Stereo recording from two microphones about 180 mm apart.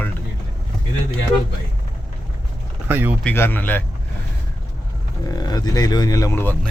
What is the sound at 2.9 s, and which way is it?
Speech, 10° right (ahead or behind).